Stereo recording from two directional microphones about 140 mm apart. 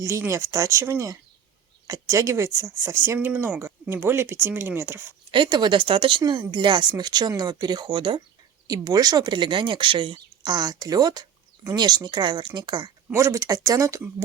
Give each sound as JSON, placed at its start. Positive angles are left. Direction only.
{"t": 0.0, "sound": "speech", "side_deg": -20}
{"t": 5.3, "sound": "speech", "side_deg": -35}
{"t": 13.1, "sound": "speech", "side_deg": -20}